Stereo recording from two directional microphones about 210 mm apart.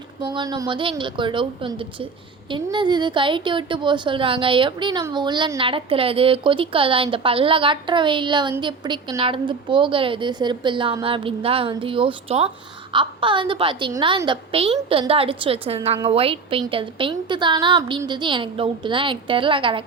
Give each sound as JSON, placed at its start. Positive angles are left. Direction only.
{"t": 0.2, "sound": "a woman's voice", "side_deg": -20}